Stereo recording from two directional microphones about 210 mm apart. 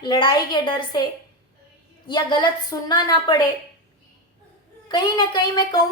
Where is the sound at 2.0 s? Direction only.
20° left (ahead or behind).